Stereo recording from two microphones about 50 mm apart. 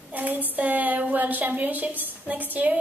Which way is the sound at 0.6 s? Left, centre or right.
Right.